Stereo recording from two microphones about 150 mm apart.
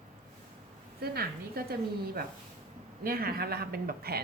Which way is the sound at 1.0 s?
90° right.